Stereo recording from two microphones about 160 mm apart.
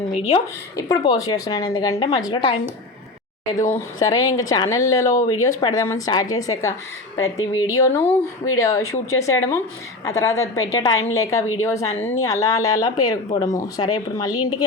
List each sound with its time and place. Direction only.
0.1 s a woman's voice: 40° left (ahead or behind)
0.8 s speech: 20° left (ahead or behind)
3.5 s speech: 20° left (ahead or behind)